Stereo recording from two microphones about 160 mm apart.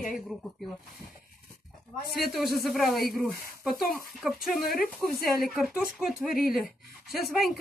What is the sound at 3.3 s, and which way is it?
Speech, 70° left (ahead or behind).